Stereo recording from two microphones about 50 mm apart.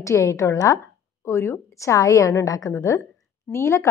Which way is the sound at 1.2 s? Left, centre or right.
Left.